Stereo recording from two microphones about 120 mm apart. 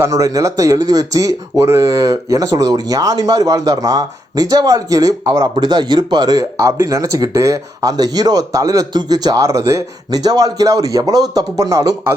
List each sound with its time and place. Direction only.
0.0 s speech: 30° right (ahead or behind)